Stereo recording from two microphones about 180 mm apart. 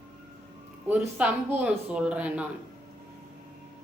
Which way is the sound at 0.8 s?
10° right (ahead or behind).